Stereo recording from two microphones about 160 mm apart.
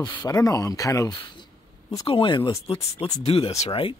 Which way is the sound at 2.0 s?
35° left (ahead or behind).